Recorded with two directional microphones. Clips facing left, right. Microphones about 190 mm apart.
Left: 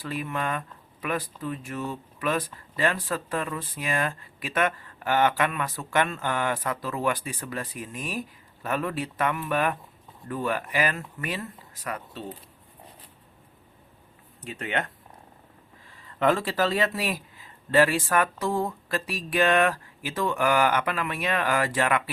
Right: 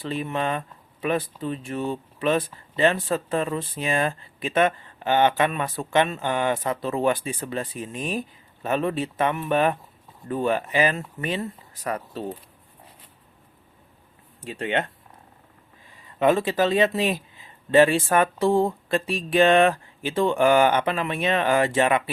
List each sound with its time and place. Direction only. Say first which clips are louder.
0.0 s speech: right 4 dB; 25° right (ahead or behind)
14.4 s speech: right 4 dB; 30° right (ahead or behind)
15.9 s speech: right 3 dB; 20° right (ahead or behind)